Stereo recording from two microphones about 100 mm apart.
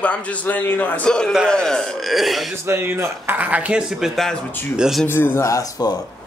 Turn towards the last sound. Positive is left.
turn(degrees=35)  # may be behind; listen again after turning